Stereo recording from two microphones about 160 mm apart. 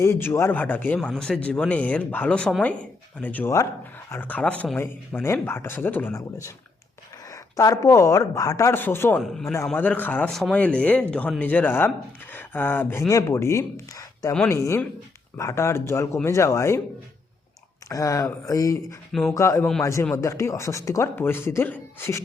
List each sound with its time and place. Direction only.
0.0 s speech: 15° left (ahead or behind)
17.8 s speech: 20° left (ahead or behind)